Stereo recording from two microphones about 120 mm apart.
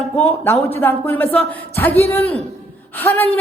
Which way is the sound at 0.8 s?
15° left (ahead or behind).